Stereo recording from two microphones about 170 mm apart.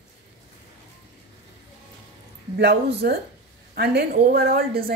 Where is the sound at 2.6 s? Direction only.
70° right (ahead or behind).